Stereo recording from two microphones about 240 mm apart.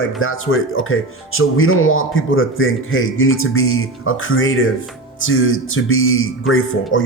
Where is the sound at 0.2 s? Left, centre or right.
Left.